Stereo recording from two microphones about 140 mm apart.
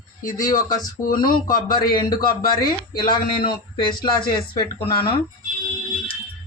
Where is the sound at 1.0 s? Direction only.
90° left.